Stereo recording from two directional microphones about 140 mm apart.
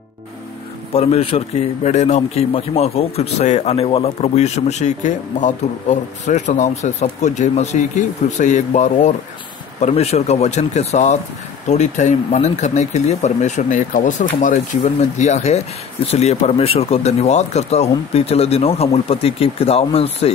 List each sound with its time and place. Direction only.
0.9 s speech: 45° left (ahead or behind)
1.9 s speech: 55° left (ahead or behind)
9.8 s speech: 50° left (ahead or behind)